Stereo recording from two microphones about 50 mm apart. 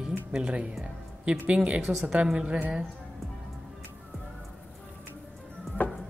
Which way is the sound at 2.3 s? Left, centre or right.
Right.